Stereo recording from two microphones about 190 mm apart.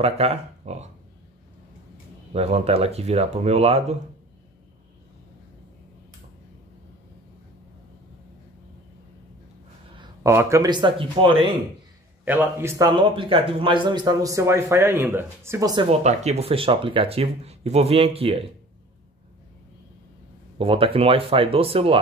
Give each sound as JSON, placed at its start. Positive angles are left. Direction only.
{"t": 0.0, "sound": "speech", "side_deg": -35}
{"t": 2.3, "sound": "speech", "side_deg": -35}
{"t": 9.9, "sound": "a sound", "side_deg": -25}
{"t": 10.3, "sound": "speech", "side_deg": -15}
{"t": 12.3, "sound": "speech", "side_deg": -10}
{"t": 20.5, "sound": "speech", "side_deg": -30}